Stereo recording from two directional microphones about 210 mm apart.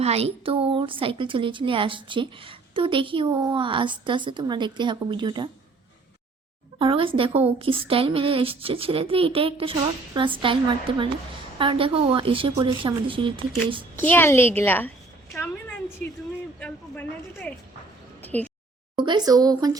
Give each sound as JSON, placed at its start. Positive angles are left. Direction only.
{"t": 0.0, "sound": "a woman's voice", "side_deg": -30}
{"t": 6.7, "sound": "a woman's voice", "side_deg": -25}
{"t": 13.9, "sound": "a woman's voice", "side_deg": 10}
{"t": 16.6, "sound": "a woman's voice", "side_deg": 5}
{"t": 18.2, "sound": "a sound", "side_deg": 10}
{"t": 18.9, "sound": "speech", "side_deg": -20}